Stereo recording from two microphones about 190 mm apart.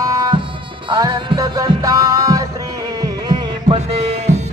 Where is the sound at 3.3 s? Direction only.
30° right (ahead or behind).